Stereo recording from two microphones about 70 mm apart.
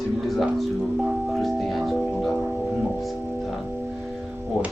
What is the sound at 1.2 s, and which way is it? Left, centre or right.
Music, centre.